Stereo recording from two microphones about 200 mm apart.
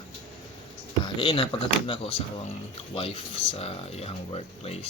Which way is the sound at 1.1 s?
25° left (ahead or behind).